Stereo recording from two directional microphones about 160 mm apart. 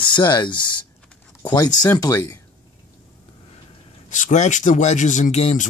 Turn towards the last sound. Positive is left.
turn(degrees=45)  # may be behind; listen again after turning